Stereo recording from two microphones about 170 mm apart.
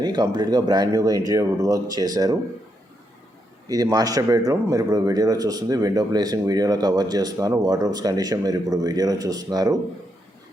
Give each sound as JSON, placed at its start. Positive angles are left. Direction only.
{"t": 0.0, "sound": "a man's voice", "side_deg": -25}
{"t": 3.7, "sound": "a man's voice", "side_deg": -20}